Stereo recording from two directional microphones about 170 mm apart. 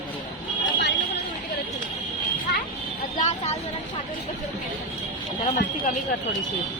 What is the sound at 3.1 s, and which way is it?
Vehicle, 45° left (ahead or behind).